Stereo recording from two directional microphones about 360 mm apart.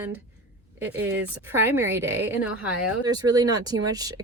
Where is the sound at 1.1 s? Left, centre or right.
Centre.